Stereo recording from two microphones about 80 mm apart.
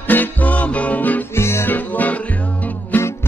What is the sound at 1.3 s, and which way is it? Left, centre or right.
Music, left.